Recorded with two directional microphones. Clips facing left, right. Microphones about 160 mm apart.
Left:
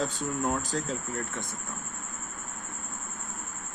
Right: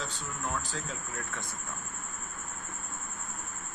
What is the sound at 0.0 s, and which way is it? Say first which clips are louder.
Speech: left 8 dB; 45° left (ahead or behind).